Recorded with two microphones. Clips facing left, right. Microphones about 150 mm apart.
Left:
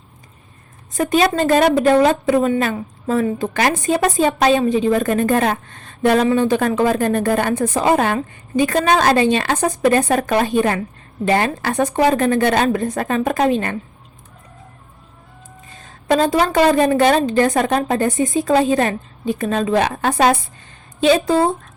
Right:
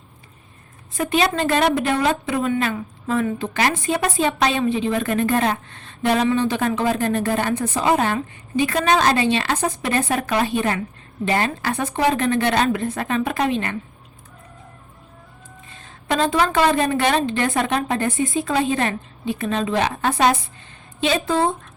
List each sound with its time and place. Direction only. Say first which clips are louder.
0.9 s a woman's voice: left 4 dB; 40° left (ahead or behind)
16.0 s a woman's voice: left 4 dB; 40° left (ahead or behind)